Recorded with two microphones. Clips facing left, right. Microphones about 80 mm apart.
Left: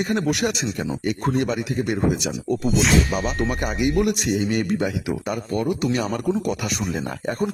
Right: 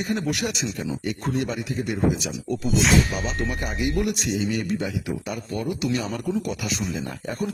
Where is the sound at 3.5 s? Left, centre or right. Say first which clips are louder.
Left 4 dB; left.